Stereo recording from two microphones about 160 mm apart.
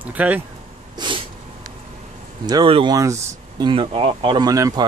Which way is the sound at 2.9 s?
20° right (ahead or behind).